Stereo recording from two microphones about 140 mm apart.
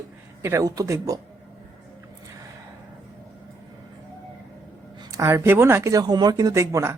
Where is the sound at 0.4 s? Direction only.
20° right (ahead or behind).